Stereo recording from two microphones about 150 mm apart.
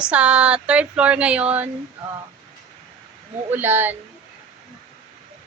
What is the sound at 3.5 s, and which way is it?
Speech, 15° right (ahead or behind).